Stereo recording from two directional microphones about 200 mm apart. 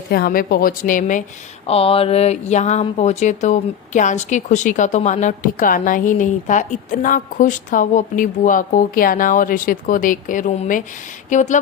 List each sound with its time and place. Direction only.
0.1 s a woman's voice: 50° left (ahead or behind)
1.6 s speech: 30° left (ahead or behind)